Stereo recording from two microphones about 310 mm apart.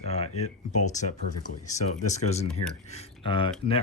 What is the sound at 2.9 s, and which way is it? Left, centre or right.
Speech, centre.